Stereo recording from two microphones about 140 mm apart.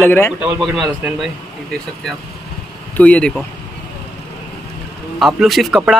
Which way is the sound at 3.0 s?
10° left (ahead or behind).